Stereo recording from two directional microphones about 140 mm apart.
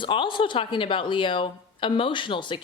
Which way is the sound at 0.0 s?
35° left (ahead or behind).